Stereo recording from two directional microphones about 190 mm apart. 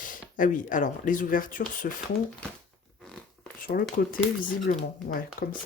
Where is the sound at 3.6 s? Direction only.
50° left (ahead or behind).